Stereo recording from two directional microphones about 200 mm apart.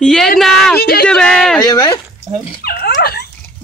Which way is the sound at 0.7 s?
50° left (ahead or behind).